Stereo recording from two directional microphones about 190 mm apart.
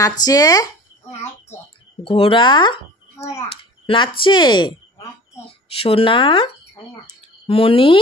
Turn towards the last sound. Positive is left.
turn(degrees=30)  # may be behind; listen again after turning